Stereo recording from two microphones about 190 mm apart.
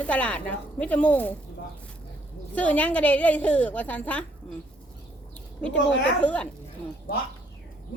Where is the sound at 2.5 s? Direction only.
10° left (ahead or behind).